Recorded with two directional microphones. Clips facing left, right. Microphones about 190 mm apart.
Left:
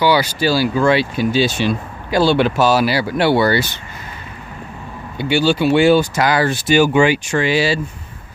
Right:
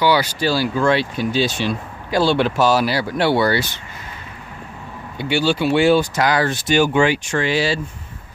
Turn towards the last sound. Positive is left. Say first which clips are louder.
# left 3 dB
turn(degrees=5)  # may be behind; listen again after turning